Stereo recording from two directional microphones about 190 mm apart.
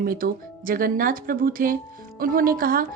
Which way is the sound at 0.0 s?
50° right (ahead or behind).